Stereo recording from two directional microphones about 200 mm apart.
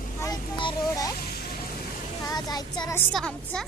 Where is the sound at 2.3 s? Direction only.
20° left (ahead or behind).